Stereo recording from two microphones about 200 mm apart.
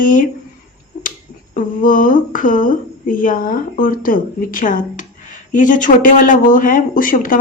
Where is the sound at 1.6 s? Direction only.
40° left (ahead or behind).